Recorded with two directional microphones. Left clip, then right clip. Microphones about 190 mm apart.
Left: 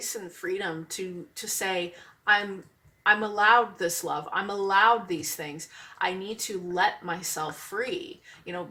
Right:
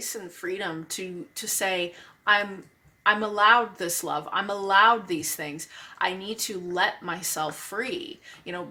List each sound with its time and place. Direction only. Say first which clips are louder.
0.0 s speech: even; 40° right (ahead or behind)